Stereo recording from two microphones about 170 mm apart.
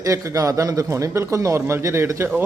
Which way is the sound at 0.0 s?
20° right (ahead or behind).